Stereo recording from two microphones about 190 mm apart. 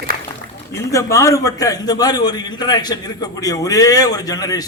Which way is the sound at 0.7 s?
15° left (ahead or behind).